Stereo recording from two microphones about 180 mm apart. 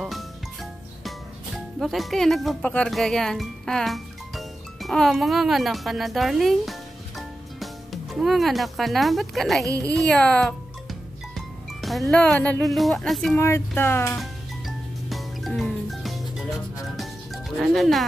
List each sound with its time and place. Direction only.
1.0 s speech: centre (ahead or behind)
9.7 s a woman's voice: 20° right (ahead or behind)
9.9 s speech: 5° left (ahead or behind)
13.4 s speech: 15° left (ahead or behind)
15.0 s music: centre (ahead or behind)